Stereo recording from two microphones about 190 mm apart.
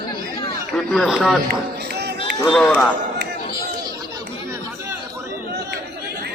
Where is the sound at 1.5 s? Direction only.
60° right (ahead or behind).